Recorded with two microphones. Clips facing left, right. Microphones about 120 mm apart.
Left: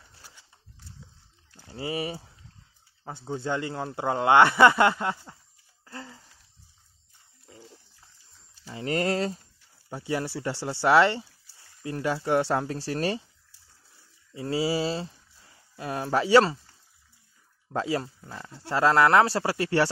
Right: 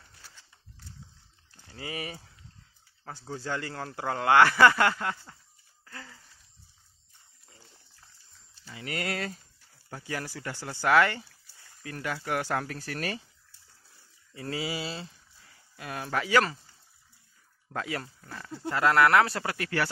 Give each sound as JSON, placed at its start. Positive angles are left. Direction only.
{"t": 0.2, "sound": "a sound", "side_deg": 15}
{"t": 1.7, "sound": "speech", "side_deg": 25}
{"t": 5.9, "sound": "wheeze", "side_deg": 25}
{"t": 8.7, "sound": "speech", "side_deg": 35}
{"t": 14.3, "sound": "a sound", "side_deg": 20}
{"t": 14.6, "sound": "speech", "side_deg": 35}
{"t": 17.7, "sound": "speech", "side_deg": 25}